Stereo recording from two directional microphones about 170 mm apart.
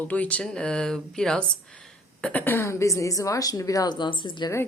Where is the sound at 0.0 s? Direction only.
10° left (ahead or behind); by 4.5 s 30° left (ahead or behind).